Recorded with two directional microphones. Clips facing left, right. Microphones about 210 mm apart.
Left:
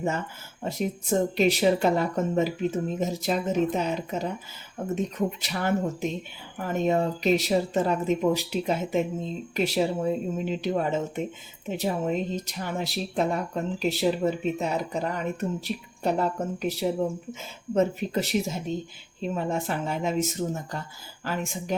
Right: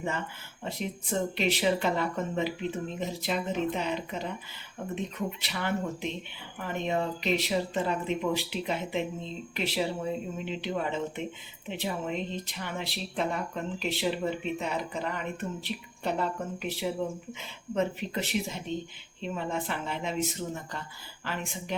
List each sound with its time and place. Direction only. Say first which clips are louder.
0.6 s speech: left 6 dB; 45° left (ahead or behind)